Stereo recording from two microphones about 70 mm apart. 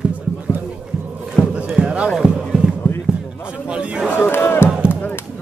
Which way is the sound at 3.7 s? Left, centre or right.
Centre.